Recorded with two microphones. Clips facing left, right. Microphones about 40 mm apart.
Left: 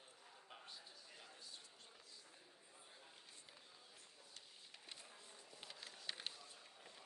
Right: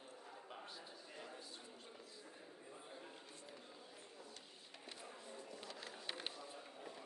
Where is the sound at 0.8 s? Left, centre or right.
Right.